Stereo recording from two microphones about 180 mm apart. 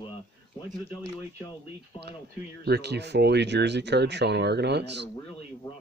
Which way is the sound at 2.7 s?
70° right (ahead or behind).